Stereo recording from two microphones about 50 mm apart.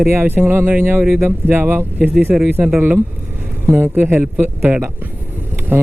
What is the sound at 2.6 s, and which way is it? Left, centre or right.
Speech, right.